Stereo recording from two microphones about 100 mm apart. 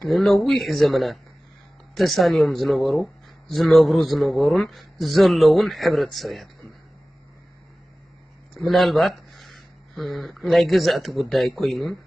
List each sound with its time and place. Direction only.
0.1 s speech: centre (ahead or behind)
8.5 s speech: centre (ahead or behind)